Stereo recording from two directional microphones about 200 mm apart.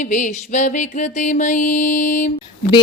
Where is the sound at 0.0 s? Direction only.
40° left (ahead or behind).